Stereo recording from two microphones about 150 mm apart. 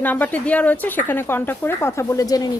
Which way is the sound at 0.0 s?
10° left (ahead or behind).